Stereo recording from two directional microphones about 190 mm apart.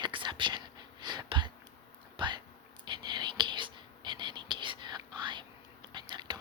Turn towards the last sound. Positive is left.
turn(degrees=-25)  # may be behind; listen again after turning